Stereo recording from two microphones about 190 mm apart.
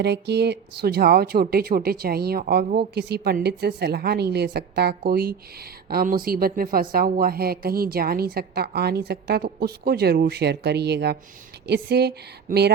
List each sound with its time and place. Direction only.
0.0 s speech: 60° right (ahead or behind)